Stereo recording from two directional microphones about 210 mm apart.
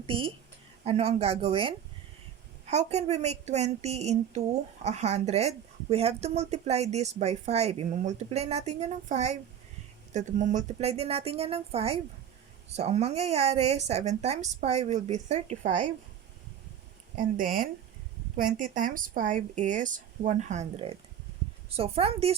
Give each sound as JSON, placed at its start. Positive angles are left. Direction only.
{"t": 0.0, "sound": "a woman's voice", "side_deg": -25}
{"t": 17.2, "sound": "speech", "side_deg": -40}